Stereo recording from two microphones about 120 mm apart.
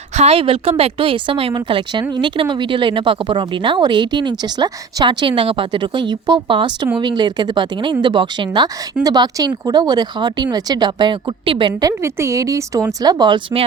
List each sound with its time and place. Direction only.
0.2 s a woman's voice: 55° right (ahead or behind)
11.8 s a woman's voice: 25° right (ahead or behind)